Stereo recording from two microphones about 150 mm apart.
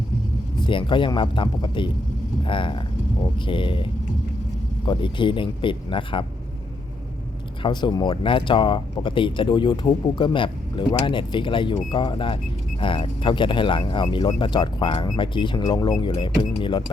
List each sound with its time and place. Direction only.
0.6 s speech: 35° left (ahead or behind)
7.6 s speech: 30° left (ahead or behind)